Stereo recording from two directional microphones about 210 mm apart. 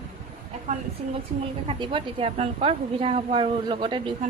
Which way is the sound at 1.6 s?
25° right (ahead or behind).